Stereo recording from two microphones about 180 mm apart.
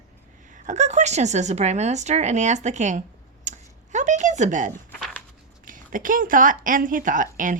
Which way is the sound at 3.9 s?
40° right (ahead or behind).